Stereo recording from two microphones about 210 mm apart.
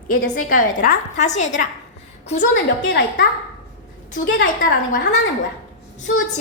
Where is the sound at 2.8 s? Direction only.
55° left (ahead or behind).